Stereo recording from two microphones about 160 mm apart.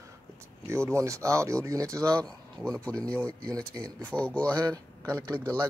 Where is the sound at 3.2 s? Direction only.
25° right (ahead or behind).